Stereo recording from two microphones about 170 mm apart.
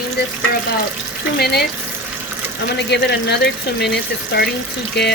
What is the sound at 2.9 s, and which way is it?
Speech, 85° left.